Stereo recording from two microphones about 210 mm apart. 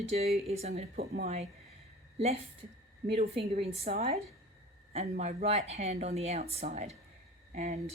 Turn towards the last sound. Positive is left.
turn(degrees=-30)  # may be behind; listen again after turning